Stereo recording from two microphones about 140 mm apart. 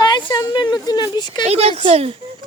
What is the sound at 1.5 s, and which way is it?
Speech, 45° right (ahead or behind).